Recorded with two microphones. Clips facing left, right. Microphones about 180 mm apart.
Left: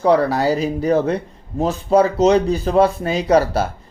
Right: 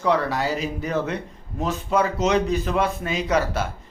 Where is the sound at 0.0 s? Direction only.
35° left (ahead or behind).